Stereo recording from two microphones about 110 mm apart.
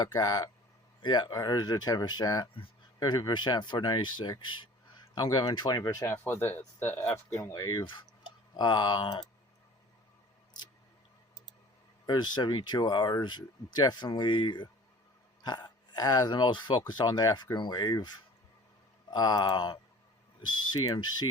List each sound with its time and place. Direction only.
0.0 s speech: 35° left (ahead or behind)
12.0 s speech: 40° left (ahead or behind)
19.1 s speech: 40° left (ahead or behind)